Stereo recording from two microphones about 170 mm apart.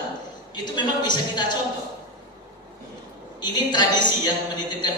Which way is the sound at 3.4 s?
25° left (ahead or behind).